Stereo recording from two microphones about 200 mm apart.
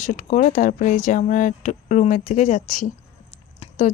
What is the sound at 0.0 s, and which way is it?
Speech, 40° left (ahead or behind).